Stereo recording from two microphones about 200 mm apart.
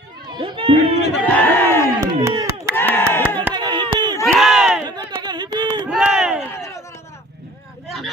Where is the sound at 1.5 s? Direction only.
10° left (ahead or behind).